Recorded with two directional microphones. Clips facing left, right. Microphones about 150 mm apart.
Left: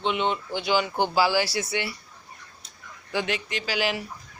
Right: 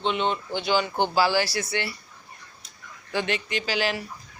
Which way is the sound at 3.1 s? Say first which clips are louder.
Right 1 dB; 5° left (ahead or behind).